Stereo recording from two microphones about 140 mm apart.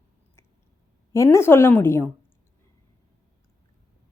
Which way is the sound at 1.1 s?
20° left (ahead or behind).